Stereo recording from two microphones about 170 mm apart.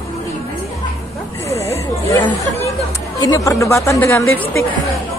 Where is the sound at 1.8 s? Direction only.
20° left (ahead or behind).